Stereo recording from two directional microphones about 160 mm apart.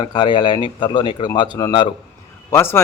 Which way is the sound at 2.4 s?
15° left (ahead or behind).